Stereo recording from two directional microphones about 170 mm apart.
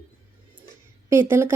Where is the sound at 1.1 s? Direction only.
15° right (ahead or behind).